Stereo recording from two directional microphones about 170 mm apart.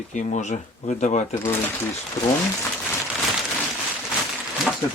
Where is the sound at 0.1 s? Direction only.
45° left (ahead or behind).